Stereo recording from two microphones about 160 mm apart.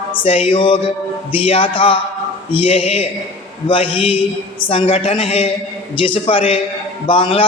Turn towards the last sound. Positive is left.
turn(degrees=35)  # may be behind; listen again after turning